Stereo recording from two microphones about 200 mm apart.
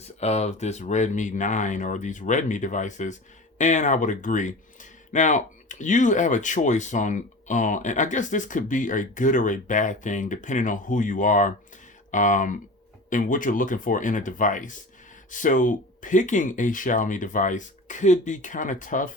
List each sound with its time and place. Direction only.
0.0 s speech: 30° left (ahead or behind)